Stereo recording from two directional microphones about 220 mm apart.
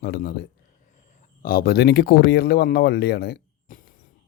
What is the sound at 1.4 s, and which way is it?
Speech, 45° left (ahead or behind).